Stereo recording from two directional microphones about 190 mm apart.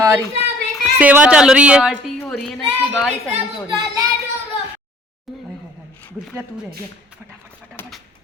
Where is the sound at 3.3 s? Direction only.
25° right (ahead or behind).